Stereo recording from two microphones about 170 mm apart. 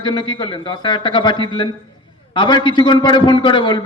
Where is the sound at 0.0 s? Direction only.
30° left (ahead or behind).